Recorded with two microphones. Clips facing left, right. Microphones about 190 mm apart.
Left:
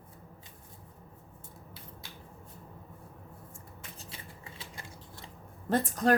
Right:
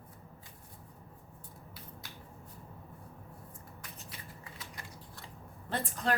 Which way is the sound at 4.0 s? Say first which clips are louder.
Left 1 dB; 25° left (ahead or behind).